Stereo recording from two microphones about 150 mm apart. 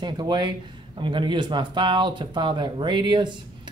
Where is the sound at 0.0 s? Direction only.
30° right (ahead or behind).